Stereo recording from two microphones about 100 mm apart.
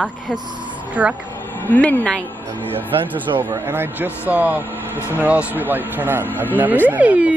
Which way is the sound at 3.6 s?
20° right (ahead or behind).